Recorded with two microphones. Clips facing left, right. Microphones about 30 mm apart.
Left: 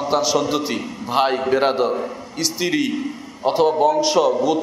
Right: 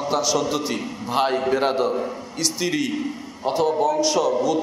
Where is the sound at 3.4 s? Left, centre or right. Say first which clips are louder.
Left 4 dB; left.